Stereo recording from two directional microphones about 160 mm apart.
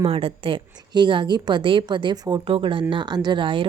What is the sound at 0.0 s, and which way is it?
A woman's voice, 35° right (ahead or behind).